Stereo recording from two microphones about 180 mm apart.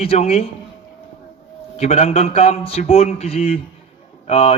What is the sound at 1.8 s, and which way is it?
Speech, 40° left (ahead or behind).